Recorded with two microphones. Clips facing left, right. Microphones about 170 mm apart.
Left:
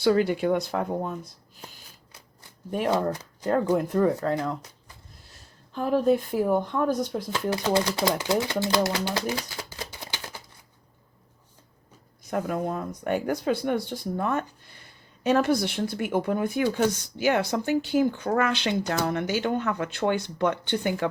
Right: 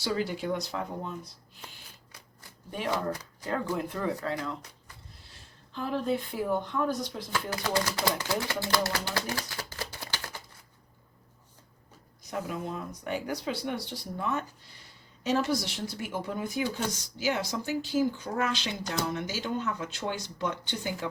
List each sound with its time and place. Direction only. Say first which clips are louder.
0.0 s speech: left 9 dB; 60° left (ahead or behind)
3.4 s speech: left 8 dB; 45° left (ahead or behind)
7.5 s speech: left 6 dB; 25° left (ahead or behind)
8.6 s a sound: left 5 dB; 20° left (ahead or behind)
12.3 s speech: left 7 dB; 50° left (ahead or behind)